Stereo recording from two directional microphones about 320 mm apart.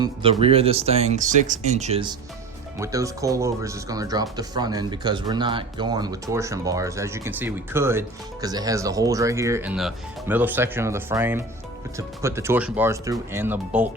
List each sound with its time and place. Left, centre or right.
0.0 s speech: centre